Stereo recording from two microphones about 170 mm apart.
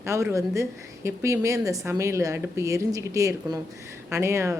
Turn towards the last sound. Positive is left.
turn(degrees=-15)  # may be behind; listen again after turning